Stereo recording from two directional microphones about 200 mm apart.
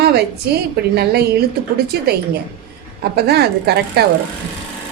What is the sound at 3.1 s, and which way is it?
Speech, 55° right (ahead or behind).